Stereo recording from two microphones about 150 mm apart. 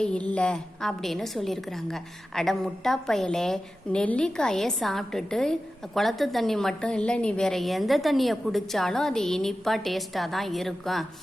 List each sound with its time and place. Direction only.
0.0 s a woman's voice: 10° left (ahead or behind)